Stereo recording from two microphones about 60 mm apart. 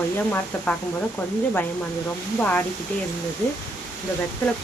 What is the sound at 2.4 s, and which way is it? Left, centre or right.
Speech, left.